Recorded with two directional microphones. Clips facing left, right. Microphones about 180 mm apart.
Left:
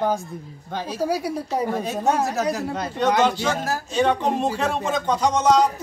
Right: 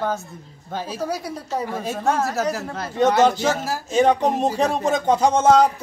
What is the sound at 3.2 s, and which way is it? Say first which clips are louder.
Speech: right 3 dB; 45° right (ahead or behind).